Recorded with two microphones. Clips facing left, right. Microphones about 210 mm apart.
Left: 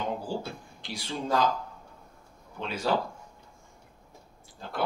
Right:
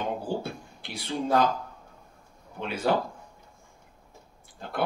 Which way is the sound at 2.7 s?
55° right (ahead or behind).